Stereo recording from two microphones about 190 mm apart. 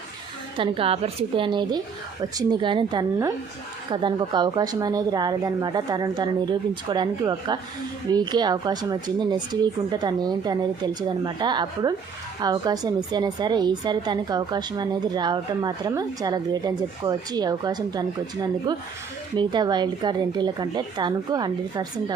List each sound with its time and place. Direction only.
0.5 s a woman's voice: 30° right (ahead or behind)
19.4 s a woman's voice: 25° right (ahead or behind)